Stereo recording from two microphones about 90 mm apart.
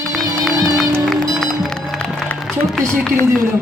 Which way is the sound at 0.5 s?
40° right (ahead or behind).